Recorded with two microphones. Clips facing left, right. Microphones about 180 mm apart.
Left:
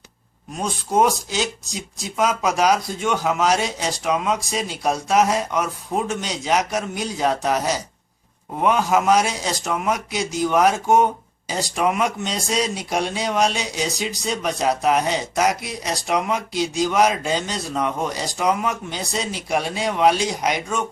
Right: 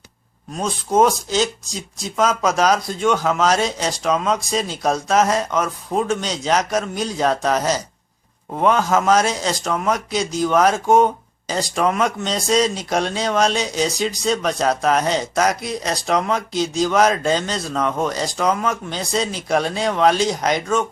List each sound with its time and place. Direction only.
0.6 s speech: 15° left (ahead or behind)